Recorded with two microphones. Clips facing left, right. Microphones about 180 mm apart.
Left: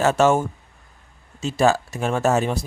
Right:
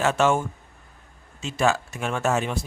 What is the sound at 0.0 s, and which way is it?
Speech, 40° left (ahead or behind).